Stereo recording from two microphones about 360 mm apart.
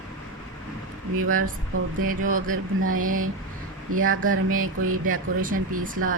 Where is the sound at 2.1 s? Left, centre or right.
Right.